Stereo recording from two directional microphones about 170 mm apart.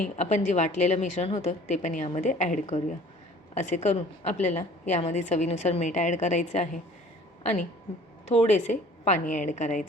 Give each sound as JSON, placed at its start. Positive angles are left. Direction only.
{"t": 0.0, "sound": "a woman's voice", "side_deg": 45}